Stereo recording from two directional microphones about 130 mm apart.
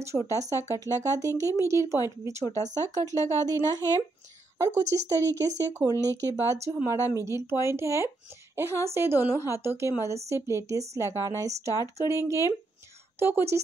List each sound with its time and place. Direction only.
0.0 s speech: 25° right (ahead or behind)